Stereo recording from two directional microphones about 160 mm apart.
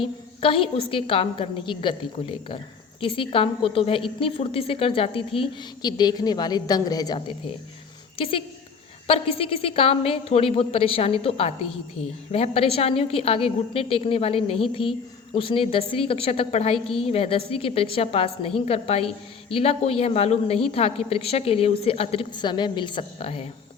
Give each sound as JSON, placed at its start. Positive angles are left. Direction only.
{"t": 0.0, "sound": "a woman's voice", "side_deg": 35}
{"t": 8.2, "sound": "a woman's voice", "side_deg": 35}